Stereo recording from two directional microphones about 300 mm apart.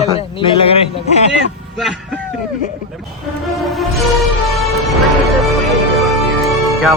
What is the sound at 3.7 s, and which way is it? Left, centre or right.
Music, centre.